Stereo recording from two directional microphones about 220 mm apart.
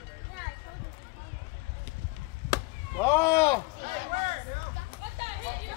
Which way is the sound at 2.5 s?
10° left (ahead or behind).